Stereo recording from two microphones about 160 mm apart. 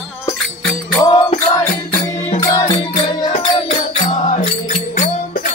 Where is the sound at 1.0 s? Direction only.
25° left (ahead or behind).